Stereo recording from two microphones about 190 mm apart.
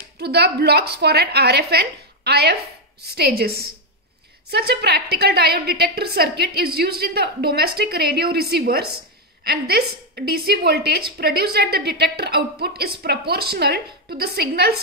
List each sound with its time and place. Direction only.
0.2 s a woman's voice: 60° right (ahead or behind)